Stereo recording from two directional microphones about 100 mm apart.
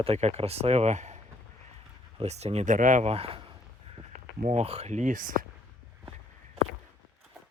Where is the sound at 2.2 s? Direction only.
90° right.